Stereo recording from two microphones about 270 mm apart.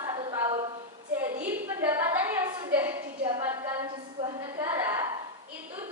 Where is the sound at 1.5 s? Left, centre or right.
Centre.